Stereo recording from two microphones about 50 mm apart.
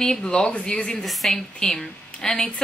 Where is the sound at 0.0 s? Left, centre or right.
Centre.